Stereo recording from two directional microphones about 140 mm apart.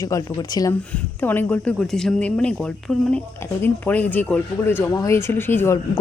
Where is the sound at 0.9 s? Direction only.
15° left (ahead or behind).